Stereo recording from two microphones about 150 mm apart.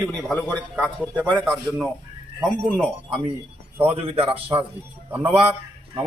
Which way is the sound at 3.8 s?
40° right (ahead or behind).